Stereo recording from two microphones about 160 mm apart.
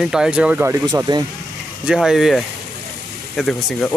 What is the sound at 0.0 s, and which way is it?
Speech, 5° right (ahead or behind).